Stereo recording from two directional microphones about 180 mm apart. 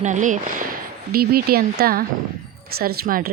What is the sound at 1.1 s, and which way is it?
Speech, 55° right (ahead or behind).